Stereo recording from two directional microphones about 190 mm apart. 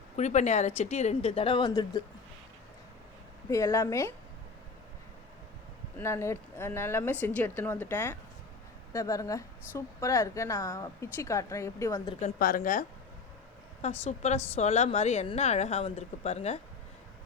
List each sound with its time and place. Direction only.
0.2 s a woman's voice: 40° left (ahead or behind); by 2.0 s 25° left (ahead or behind)
3.5 s a woman's voice: 15° left (ahead or behind)
6.0 s a woman's voice: 15° left (ahead or behind)
12.4 s a woman's voice: 50° left (ahead or behind)
14.0 s speech: 35° left (ahead or behind)